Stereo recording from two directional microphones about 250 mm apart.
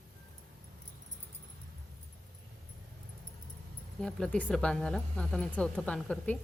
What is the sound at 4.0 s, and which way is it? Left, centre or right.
Speech, centre.